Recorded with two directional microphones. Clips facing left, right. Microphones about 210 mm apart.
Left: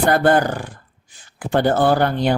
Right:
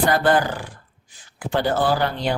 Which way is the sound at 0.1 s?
50° left (ahead or behind).